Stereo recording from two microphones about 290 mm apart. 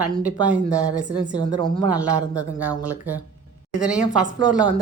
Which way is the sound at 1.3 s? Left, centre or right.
Centre.